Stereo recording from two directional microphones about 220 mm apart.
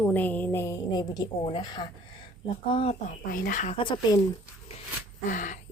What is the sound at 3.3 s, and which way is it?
Speech, 40° left (ahead or behind).